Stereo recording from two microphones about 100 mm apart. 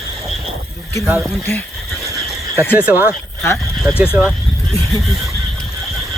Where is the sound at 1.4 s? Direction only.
20° left (ahead or behind).